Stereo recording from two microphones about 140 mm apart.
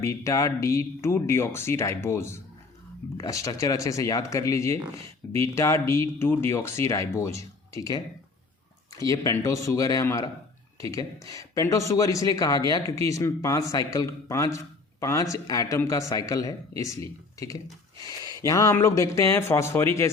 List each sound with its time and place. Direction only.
0.0 s a man's voice: 20° left (ahead or behind)